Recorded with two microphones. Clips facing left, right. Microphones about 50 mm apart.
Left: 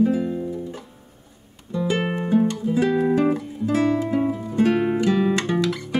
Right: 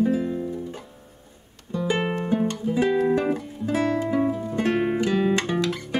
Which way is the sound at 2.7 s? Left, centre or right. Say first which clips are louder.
Even; centre.